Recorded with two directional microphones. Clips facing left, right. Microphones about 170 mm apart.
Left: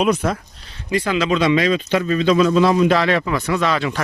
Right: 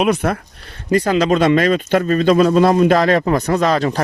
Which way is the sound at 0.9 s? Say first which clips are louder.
Right 4 dB; 45° right (ahead or behind).